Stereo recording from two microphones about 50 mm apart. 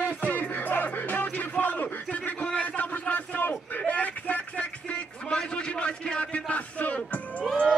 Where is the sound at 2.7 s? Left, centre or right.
Left.